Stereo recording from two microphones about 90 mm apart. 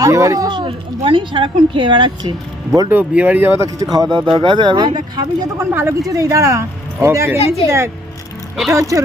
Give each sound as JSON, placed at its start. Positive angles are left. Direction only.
{"t": 0.0, "sound": "speech", "side_deg": -35}
{"t": 0.4, "sound": "speech", "side_deg": -55}
{"t": 1.0, "sound": "speech", "side_deg": -65}
{"t": 2.9, "sound": "speech", "side_deg": -15}
{"t": 3.9, "sound": "speech", "side_deg": -50}
{"t": 4.4, "sound": "speech", "side_deg": -60}
{"t": 5.5, "sound": "speech", "side_deg": -25}
{"t": 6.1, "sound": "speech", "side_deg": -35}
{"t": 7.3, "sound": "a woman's voice", "side_deg": 90}
{"t": 8.7, "sound": "speech", "side_deg": -40}